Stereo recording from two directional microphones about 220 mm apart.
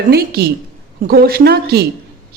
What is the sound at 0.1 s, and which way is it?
Speech, 45° right (ahead or behind).